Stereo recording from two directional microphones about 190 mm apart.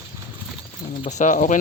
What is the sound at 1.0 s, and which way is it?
Speech, 40° left (ahead or behind).